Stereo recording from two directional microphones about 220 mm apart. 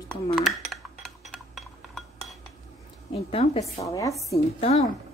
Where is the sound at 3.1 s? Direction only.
25° left (ahead or behind).